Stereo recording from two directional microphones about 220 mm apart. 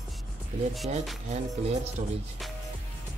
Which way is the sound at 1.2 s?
30° right (ahead or behind).